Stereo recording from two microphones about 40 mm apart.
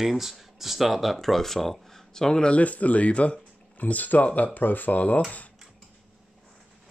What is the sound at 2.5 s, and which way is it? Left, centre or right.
Speech, left.